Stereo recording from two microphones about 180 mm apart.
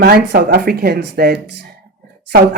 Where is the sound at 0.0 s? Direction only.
60° right (ahead or behind).